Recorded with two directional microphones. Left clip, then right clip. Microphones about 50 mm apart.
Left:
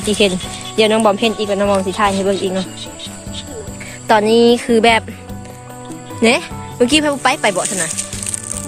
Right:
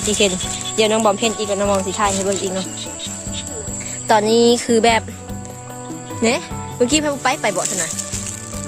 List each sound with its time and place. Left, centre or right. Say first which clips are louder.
0.0 s speech: left 3 dB; centre
4.0 s jingle bell: left 3 dB; right
4.4 s a sound: left 3 dB; right
6.2 s speech: left 5 dB; centre